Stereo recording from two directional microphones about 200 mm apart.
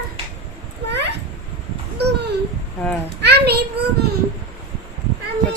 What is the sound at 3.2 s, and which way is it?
Speech, 55° right (ahead or behind).